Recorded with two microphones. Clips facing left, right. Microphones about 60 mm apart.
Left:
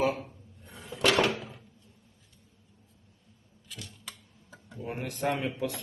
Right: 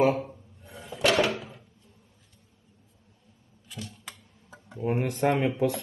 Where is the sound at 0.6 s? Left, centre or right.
Centre.